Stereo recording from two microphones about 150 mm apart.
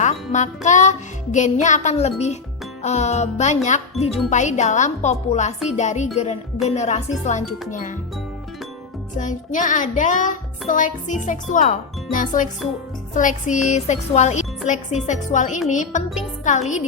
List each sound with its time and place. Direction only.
0.0 s music: 50° left (ahead or behind)
4.0 s speech: centre (ahead or behind)
4.3 s music: 55° left (ahead or behind)
9.1 s music: 55° left (ahead or behind)